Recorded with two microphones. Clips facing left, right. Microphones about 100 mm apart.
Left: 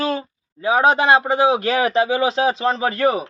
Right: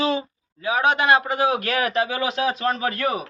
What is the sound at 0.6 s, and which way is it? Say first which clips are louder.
A man's voice: left 4 dB; 35° left (ahead or behind).